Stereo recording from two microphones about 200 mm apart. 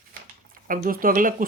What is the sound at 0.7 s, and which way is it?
Speech, 45° right (ahead or behind).